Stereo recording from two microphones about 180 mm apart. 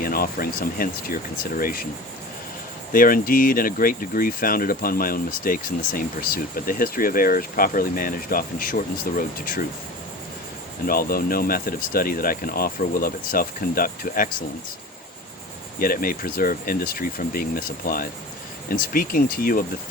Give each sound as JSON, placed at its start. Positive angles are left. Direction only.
{"t": 0.0, "sound": "speech", "side_deg": 55}
{"t": 2.9, "sound": "speech", "side_deg": 50}
{"t": 10.8, "sound": "speech", "side_deg": 55}
{"t": 15.8, "sound": "speech", "side_deg": 55}